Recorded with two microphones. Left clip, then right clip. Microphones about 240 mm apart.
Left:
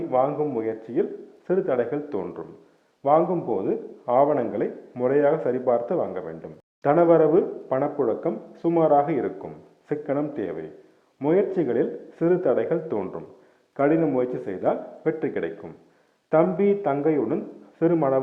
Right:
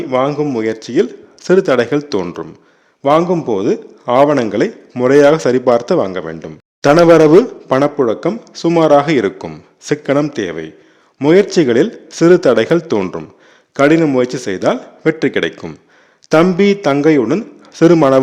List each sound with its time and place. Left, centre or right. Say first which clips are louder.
0.1 s a man's voice: right 8 dB; right